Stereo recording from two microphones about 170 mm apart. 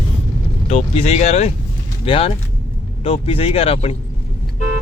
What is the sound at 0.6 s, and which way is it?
Speech, 40° left (ahead or behind).